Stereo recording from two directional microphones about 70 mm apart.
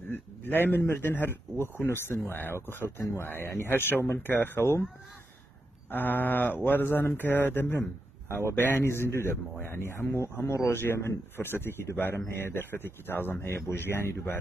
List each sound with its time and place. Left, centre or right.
0.0 s a man's voice: left
5.9 s a man's voice: left